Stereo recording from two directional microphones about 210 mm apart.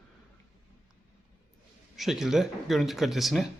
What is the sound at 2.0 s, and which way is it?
Speech, centre (ahead or behind).